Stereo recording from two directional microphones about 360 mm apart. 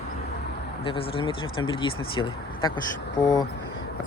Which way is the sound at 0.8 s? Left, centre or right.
Centre.